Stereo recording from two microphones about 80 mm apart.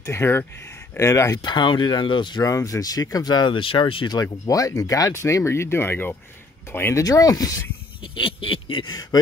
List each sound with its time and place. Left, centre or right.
0.0 s speech: left
1.4 s speech: left
2.4 s speech: left
5.1 s speech: left
7.0 s speech: left
8.0 s a sound: left
9.1 s speech: left